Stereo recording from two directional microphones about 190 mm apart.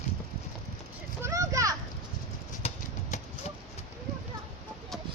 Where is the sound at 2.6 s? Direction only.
35° left (ahead or behind).